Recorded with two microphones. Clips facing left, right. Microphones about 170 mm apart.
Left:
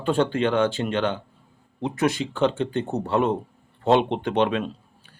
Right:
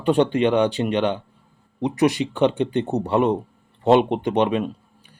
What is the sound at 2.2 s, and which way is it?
Speech, 5° right (ahead or behind).